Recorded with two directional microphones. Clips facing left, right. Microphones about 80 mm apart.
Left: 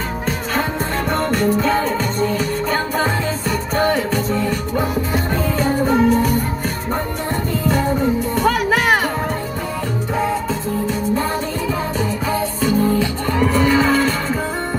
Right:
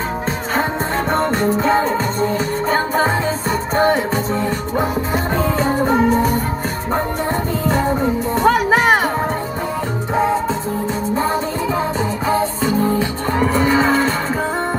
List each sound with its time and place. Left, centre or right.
0.6 s music: right
5.6 s music: right
7.6 s music: right
10.1 s music: right
12.3 s music: right